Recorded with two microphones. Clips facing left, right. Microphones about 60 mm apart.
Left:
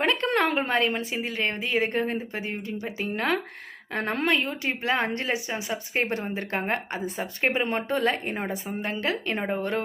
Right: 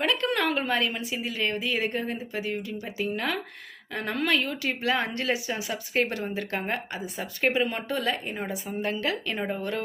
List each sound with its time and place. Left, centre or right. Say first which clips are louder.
0.0 s speech: left 2 dB; left